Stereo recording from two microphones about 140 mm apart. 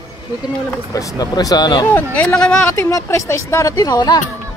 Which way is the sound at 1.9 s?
10° left (ahead or behind).